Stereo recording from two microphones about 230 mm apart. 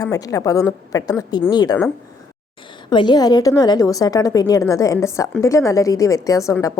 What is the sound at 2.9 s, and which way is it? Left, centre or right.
A woman's voice, centre.